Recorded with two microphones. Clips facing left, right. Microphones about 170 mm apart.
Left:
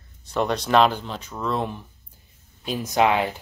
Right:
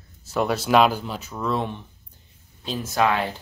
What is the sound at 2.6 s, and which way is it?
Speech, 20° left (ahead or behind).